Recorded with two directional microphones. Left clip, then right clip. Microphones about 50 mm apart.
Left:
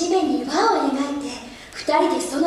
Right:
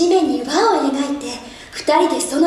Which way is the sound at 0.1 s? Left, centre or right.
Left.